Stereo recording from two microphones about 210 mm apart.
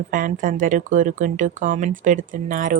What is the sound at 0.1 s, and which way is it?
A woman's voice, 40° right (ahead or behind).